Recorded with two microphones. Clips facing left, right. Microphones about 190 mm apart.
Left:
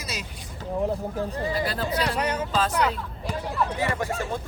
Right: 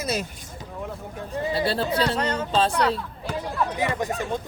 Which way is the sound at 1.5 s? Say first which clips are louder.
Right 3 dB; 30° right (ahead or behind).